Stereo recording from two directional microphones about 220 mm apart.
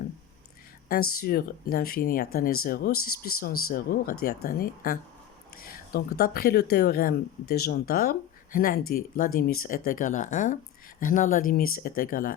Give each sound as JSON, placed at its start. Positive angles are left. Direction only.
{"t": 1.2, "sound": "speech", "side_deg": 45}
{"t": 5.5, "sound": "a sound", "side_deg": 40}
{"t": 6.1, "sound": "speech", "side_deg": 45}